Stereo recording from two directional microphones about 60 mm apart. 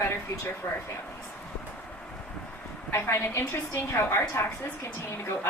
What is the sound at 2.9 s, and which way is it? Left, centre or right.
A woman's voice, left.